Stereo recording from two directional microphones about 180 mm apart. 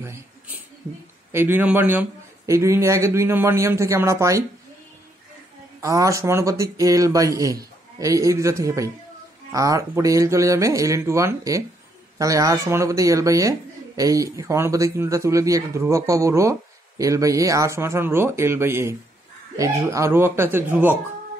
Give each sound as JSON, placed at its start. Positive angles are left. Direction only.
{"t": 0.0, "sound": "a sound", "side_deg": -15}
{"t": 1.3, "sound": "speech", "side_deg": -10}
{"t": 5.8, "sound": "speech", "side_deg": -20}